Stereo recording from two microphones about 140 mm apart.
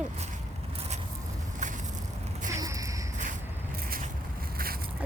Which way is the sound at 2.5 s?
25° right (ahead or behind).